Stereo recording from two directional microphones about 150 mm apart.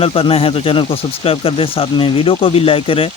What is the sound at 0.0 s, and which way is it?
Speech, 40° left (ahead or behind).